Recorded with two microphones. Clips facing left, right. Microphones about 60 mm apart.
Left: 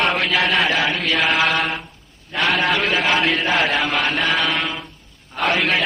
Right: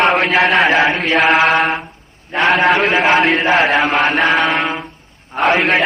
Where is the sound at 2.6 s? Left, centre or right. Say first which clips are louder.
Right 6 dB; right.